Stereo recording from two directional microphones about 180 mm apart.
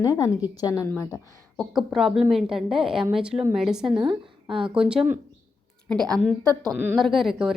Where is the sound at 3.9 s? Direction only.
25° right (ahead or behind).